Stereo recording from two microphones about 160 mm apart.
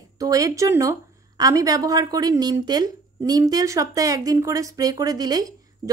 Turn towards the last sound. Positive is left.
turn(degrees=-25)  # may be behind; listen again after turning